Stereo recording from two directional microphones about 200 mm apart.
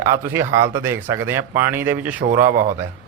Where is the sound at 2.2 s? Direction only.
45° right (ahead or behind).